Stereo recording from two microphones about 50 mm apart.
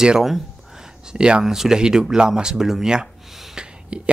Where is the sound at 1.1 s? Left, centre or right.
Centre.